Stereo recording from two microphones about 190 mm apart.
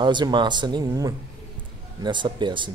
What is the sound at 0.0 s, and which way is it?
A man's voice, 25° right (ahead or behind).